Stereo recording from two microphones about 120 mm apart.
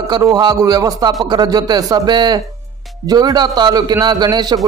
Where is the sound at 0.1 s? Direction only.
30° right (ahead or behind).